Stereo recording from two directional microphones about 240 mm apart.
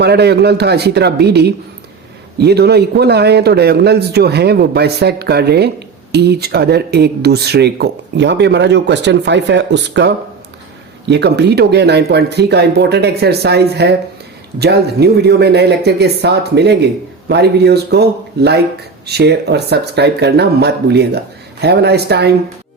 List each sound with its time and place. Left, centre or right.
0.0 s a man's voice: right
11.1 s a man's voice: right